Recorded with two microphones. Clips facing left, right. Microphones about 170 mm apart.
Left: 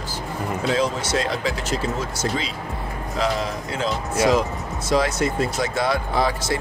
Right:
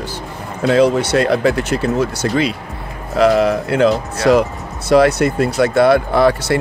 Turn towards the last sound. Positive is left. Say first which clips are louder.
# right 8 dB
turn(degrees=-65)  # may be behind; listen again after turning